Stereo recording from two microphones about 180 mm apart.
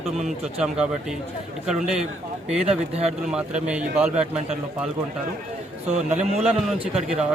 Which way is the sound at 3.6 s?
5° right (ahead or behind).